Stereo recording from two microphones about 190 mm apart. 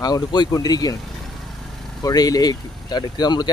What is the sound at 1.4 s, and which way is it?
Vehicle, centre (ahead or behind).